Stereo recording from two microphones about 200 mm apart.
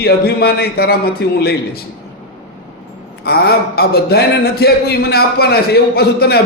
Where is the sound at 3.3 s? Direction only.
50° left (ahead or behind).